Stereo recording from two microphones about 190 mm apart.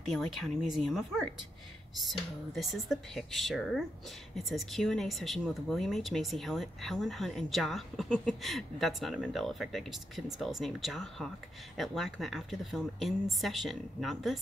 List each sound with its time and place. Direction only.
0.1 s speech: centre (ahead or behind)
2.5 s speech: centre (ahead or behind)